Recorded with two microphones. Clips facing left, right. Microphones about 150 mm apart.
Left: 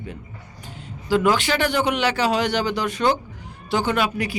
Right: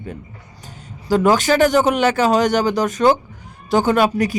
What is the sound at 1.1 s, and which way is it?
A man's voice, 40° right (ahead or behind).